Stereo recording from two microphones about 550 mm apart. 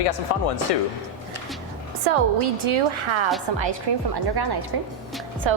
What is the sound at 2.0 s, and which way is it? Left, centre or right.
A woman's voice, right.